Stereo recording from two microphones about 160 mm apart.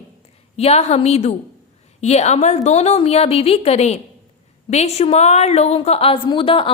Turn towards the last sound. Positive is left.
turn(degrees=35)  # may be behind; listen again after turning